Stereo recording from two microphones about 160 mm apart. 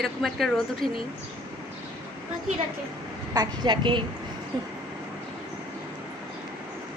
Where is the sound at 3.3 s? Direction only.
25° right (ahead or behind).